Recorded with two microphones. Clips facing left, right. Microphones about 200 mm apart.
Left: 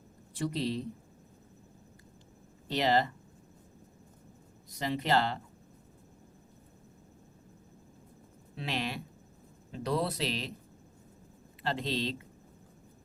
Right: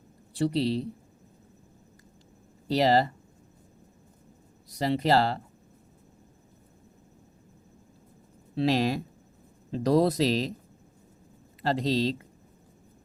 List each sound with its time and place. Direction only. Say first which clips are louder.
0.3 s speech: right 7 dB; 30° right (ahead or behind)
2.6 s speech: right 5 dB; 35° right (ahead or behind)
4.8 s speech: right 6 dB; 35° right (ahead or behind)
8.5 s speech: right 11 dB; 40° right (ahead or behind)
11.6 s speech: right 7 dB; 40° right (ahead or behind)